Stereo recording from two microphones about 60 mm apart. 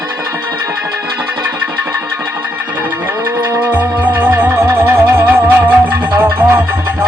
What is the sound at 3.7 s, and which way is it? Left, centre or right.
Music, right.